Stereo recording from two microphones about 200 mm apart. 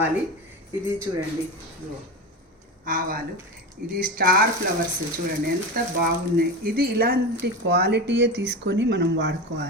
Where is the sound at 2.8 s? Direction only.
45° right (ahead or behind).